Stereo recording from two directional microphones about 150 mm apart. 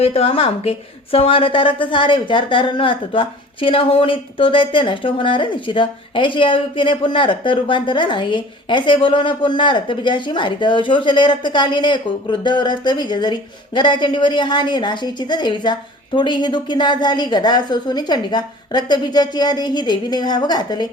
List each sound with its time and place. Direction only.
0.0 s a woman's voice: 40° left (ahead or behind)